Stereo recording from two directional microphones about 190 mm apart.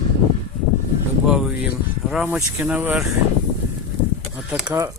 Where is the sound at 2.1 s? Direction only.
Centre (ahead or behind).